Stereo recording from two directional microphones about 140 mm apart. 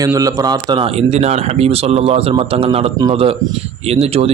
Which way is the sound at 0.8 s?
50° right (ahead or behind).